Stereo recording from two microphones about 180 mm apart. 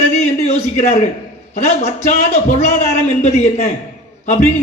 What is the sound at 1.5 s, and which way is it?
A man's voice, 40° left (ahead or behind).